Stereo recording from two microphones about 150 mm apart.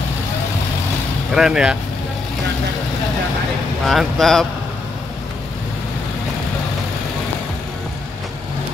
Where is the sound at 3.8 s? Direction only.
Centre (ahead or behind).